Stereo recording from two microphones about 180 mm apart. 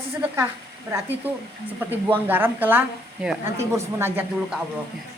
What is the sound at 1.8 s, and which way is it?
A woman's voice, 10° right (ahead or behind).